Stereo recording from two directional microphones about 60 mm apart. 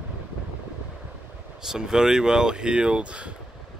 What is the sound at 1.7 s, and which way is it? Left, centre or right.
Speech, centre.